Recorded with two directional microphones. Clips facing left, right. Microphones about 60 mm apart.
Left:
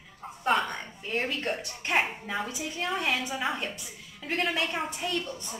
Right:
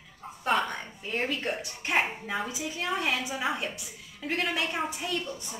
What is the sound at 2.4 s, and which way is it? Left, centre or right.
A woman's voice, centre.